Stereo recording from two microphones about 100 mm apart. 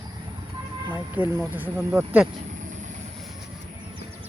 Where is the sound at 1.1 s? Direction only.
20° right (ahead or behind).